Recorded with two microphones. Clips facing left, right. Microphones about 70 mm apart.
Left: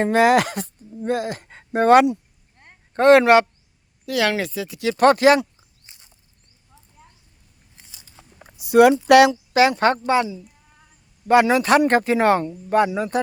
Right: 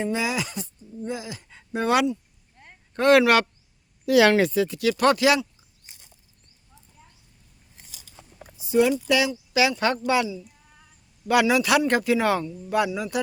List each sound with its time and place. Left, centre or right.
0.0 s speech: left
2.9 s speech: left
4.0 s speech: centre
4.9 s speech: left
8.5 s speech: left
9.5 s speech: left
11.3 s speech: left